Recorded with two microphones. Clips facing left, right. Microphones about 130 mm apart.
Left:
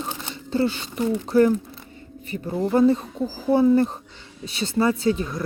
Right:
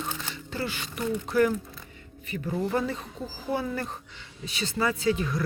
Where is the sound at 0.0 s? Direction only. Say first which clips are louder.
Left 3 dB; 25° left (ahead or behind).